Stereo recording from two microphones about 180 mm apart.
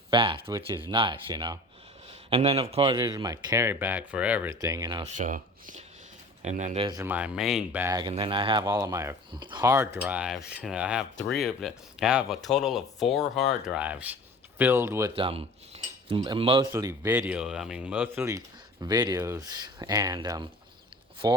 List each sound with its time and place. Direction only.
0.1 s speech: 30° right (ahead or behind); by 4.5 s 10° right (ahead or behind)
4.6 s speech: 20° right (ahead or behind)
5.1 s speech: 45° right (ahead or behind)
7.0 s speech: 10° right (ahead or behind)
8.1 s speech: 30° right (ahead or behind)
8.6 s speech: 15° right (ahead or behind)
15.1 s cutlery: 30° right (ahead or behind)
16.7 s speech: 15° right (ahead or behind)